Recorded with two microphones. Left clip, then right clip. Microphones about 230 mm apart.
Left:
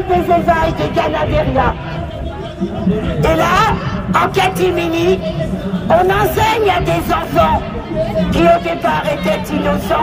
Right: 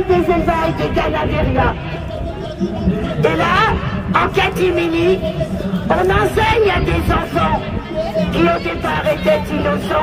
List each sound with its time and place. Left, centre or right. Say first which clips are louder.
0.1 s speech: left 4 dB; left
3.2 s speech: left 2 dB; left